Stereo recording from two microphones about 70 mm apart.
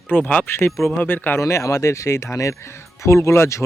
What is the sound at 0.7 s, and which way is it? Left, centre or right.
Speech, centre.